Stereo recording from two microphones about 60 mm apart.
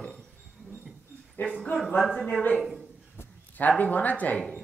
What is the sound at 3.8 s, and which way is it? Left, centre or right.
Speech, left.